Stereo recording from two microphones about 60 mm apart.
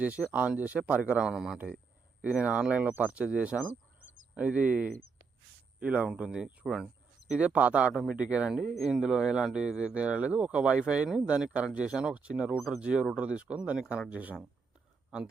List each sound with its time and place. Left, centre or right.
0.0 s speech: right
1.3 s speech: centre; by 14.3 s right